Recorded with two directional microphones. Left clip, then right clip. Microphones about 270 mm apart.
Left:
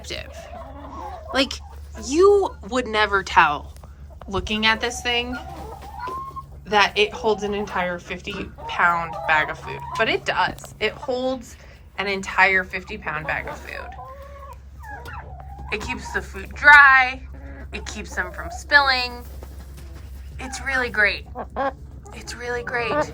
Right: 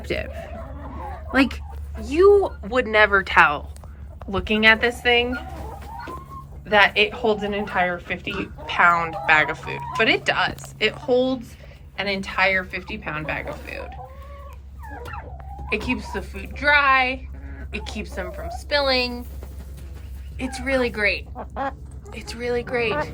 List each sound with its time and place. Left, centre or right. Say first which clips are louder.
0.0 s a woman's voice: right 5 dB; centre
6.7 s a woman's voice: right 2 dB; centre
15.7 s a woman's voice: right 1 dB; centre
20.4 s a woman's voice: right 1 dB; centre
21.3 s speech: left 3 dB; left
22.1 s a woman's voice: right 3 dB; centre